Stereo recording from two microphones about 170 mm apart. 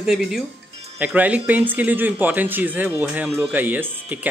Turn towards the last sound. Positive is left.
turn(degrees=-10)  # may be behind; listen again after turning